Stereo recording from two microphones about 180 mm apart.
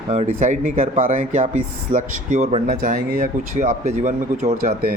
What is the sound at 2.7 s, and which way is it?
Speech, 50° right (ahead or behind).